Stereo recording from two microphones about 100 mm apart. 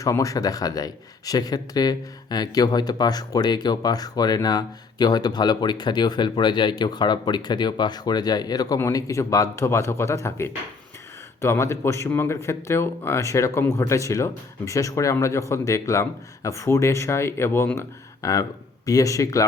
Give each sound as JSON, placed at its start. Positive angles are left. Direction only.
{"t": 0.0, "sound": "a man's voice", "side_deg": 35}
{"t": 17.7, "sound": "speech", "side_deg": 35}